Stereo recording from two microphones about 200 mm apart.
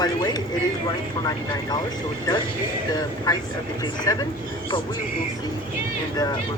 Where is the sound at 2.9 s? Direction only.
20° left (ahead or behind).